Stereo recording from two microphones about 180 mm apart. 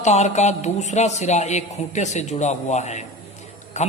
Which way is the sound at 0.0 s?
40° left (ahead or behind).